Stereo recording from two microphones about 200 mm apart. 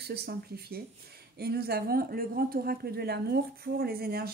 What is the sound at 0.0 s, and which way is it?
Speech, 50° right (ahead or behind).